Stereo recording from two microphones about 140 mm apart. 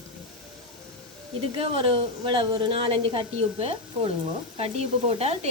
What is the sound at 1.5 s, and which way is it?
A woman's voice, 40° right (ahead or behind).